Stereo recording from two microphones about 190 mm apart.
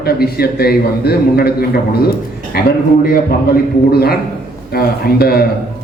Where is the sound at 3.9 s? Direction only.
55° left (ahead or behind).